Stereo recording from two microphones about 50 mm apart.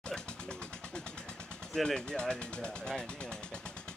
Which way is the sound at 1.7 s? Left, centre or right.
Centre.